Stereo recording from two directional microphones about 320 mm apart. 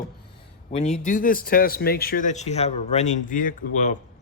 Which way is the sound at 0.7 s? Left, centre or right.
Left.